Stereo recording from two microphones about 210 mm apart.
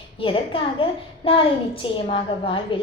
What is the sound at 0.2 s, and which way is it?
A woman's voice, 25° left (ahead or behind).